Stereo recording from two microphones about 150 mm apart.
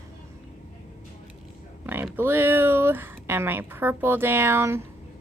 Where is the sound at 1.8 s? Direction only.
15° right (ahead or behind).